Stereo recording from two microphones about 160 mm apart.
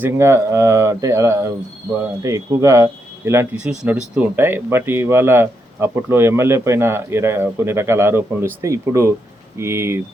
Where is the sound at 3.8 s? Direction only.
5° right (ahead or behind).